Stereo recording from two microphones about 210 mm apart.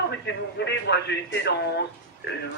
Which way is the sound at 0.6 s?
55° left (ahead or behind).